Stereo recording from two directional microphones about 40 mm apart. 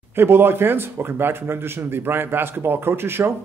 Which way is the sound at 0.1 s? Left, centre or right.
Right.